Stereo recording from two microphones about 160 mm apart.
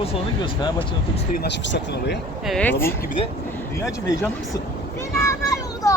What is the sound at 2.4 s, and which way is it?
Speech, 5° left (ahead or behind).